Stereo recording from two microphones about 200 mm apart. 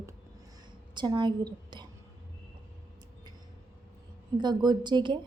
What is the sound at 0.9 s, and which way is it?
Speech, 20° right (ahead or behind).